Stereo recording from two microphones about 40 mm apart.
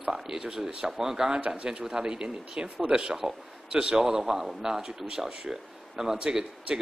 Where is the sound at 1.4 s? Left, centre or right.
Right.